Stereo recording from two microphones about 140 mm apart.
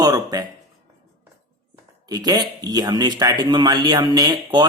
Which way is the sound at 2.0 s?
25° right (ahead or behind).